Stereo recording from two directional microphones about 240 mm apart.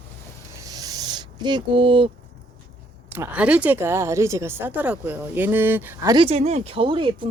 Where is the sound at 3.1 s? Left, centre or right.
Centre.